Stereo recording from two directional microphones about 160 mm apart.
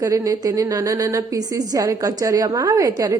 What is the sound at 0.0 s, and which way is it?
A woman's voice, 20° right (ahead or behind).